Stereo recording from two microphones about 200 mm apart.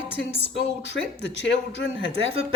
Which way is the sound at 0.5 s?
60° left (ahead or behind).